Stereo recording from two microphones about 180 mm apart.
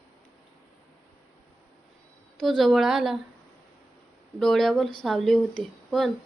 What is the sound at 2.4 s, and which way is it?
Speech, centre (ahead or behind).